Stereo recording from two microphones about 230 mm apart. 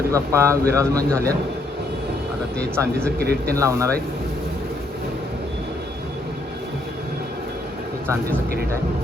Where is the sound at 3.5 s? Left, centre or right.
Centre.